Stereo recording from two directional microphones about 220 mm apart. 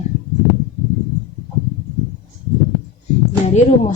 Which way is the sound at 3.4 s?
30° left (ahead or behind).